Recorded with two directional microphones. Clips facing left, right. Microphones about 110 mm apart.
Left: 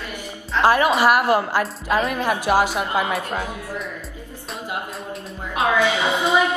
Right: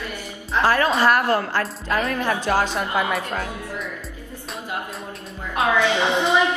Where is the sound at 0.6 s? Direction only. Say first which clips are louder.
Left 2 dB; 15° left (ahead or behind).